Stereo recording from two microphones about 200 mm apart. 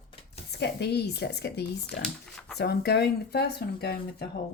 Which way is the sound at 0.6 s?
55° left (ahead or behind).